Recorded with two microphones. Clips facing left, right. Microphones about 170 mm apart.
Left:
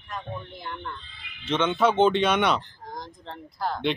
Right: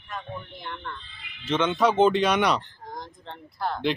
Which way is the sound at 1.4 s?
Centre (ahead or behind).